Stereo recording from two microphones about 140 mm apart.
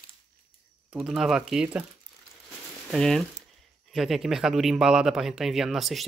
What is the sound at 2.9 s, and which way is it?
Speech, 5° left (ahead or behind).